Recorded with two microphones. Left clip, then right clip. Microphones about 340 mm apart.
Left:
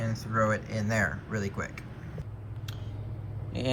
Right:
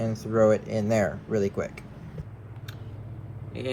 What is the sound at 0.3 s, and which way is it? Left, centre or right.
Speech, centre.